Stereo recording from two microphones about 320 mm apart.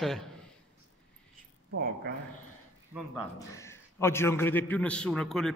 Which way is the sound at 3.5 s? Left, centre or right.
Centre.